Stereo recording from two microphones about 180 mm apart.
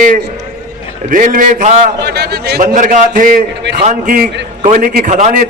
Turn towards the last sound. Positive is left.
turn(degrees=-45)  # may be behind; listen again after turning